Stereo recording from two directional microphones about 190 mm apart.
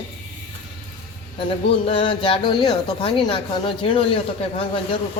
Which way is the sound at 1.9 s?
30° left (ahead or behind).